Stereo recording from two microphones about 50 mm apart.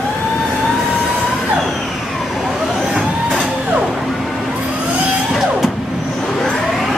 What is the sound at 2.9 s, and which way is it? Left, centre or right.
Music, centre.